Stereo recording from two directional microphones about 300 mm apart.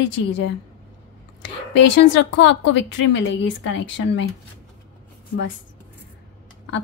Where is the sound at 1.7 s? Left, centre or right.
Left.